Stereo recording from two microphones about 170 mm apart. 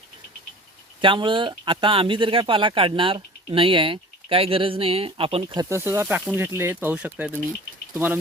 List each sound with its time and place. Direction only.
1.0 s speech: 30° right (ahead or behind)
5.6 s speech: 15° right (ahead or behind)